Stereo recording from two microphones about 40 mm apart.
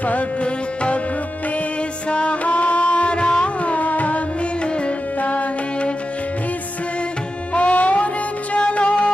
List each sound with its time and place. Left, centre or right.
0.0 s music: left
2.0 s music: left
3.6 s music: left
7.5 s music: left